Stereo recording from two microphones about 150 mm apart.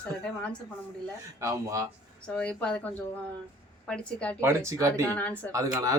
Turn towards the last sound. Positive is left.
turn(degrees=-25)  # may be behind; listen again after turning